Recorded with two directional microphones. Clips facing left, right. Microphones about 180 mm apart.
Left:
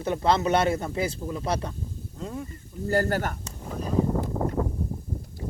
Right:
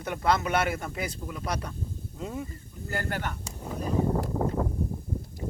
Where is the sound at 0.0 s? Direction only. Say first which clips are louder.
Left 3 dB; 25° left (ahead or behind).